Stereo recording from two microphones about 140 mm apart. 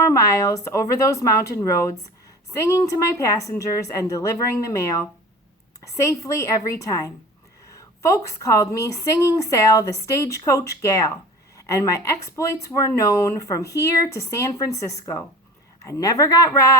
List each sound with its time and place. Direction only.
0.0 s speech: 25° left (ahead or behind)